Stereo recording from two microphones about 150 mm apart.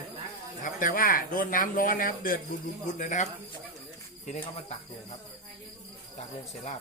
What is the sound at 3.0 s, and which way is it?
Speech, 55° left (ahead or behind).